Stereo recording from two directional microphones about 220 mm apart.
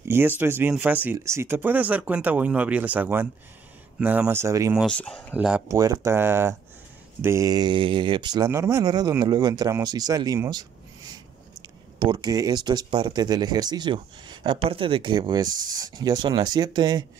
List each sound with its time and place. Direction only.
0.4 s speech: 10° right (ahead or behind)
4.8 s speech: 5° left (ahead or behind); by 10.7 s 15° right (ahead or behind)
12.0 s speech: 20° right (ahead or behind)